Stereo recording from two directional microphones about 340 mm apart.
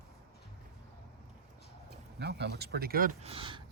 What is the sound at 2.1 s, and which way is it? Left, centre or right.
Speech, right.